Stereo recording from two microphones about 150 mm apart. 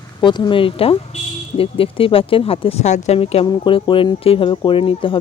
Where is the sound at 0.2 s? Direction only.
30° left (ahead or behind).